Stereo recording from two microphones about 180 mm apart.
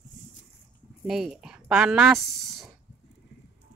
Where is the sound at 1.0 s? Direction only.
Centre (ahead or behind).